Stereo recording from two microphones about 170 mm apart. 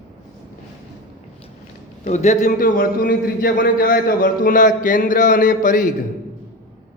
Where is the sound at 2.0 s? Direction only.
45° left (ahead or behind).